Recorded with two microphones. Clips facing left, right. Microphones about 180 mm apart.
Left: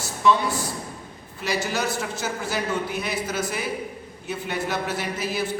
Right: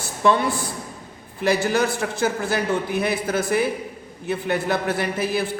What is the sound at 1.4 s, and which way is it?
A man's voice, 55° right (ahead or behind).